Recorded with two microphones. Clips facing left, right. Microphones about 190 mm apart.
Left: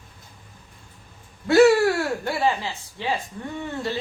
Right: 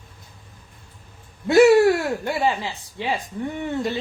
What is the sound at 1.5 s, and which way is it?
Speech, 20° right (ahead or behind).